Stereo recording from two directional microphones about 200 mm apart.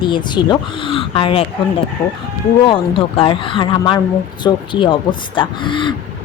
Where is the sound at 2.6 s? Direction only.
25° left (ahead or behind).